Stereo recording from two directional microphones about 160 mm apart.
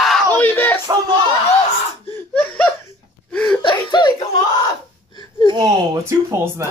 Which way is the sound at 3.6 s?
30° left (ahead or behind).